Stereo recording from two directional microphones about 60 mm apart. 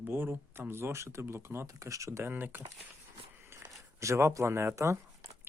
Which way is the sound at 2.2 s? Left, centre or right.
Right.